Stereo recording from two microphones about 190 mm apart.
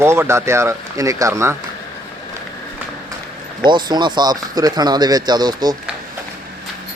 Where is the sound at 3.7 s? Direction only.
25° right (ahead or behind).